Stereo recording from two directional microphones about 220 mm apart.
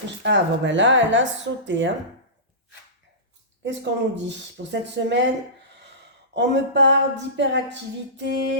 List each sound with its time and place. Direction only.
0.2 s speech: 55° right (ahead or behind)
3.6 s a woman's voice: 55° right (ahead or behind)
6.3 s a woman's voice: 50° right (ahead or behind)